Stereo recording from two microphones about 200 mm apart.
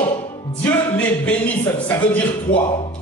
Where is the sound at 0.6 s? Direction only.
10° left (ahead or behind).